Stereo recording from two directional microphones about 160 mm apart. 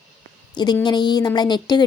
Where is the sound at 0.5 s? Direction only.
30° left (ahead or behind).